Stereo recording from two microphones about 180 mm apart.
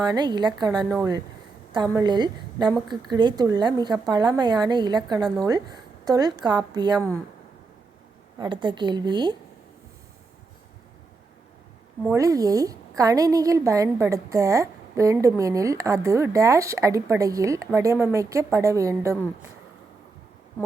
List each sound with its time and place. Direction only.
0.0 s a woman's voice: 25° right (ahead or behind)
8.4 s a woman's voice: 25° right (ahead or behind)
12.0 s a woman's voice: 15° right (ahead or behind)